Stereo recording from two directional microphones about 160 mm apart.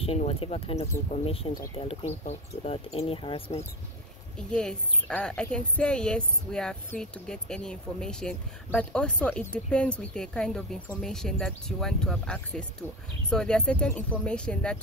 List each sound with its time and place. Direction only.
0.0 s speech: 35° left (ahead or behind)
4.4 s a woman's voice: 5° left (ahead or behind)